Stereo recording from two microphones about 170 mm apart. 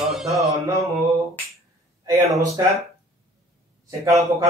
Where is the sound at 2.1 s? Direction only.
20° right (ahead or behind).